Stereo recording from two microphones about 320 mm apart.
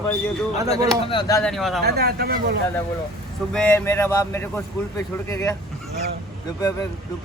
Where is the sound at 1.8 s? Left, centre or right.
Right.